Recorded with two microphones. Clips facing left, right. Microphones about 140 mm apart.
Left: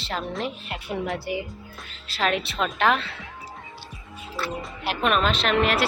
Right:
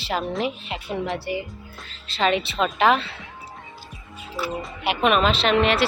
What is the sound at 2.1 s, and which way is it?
Speech, centre (ahead or behind).